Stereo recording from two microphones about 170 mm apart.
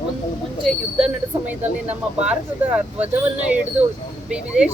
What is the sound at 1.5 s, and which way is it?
Speech, 10° right (ahead or behind).